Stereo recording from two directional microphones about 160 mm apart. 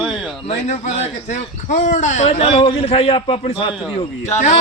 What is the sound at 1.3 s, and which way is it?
A man's voice, 50° left (ahead or behind).